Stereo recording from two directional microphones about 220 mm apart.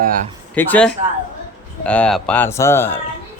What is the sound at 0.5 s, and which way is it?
Speech, 10° left (ahead or behind).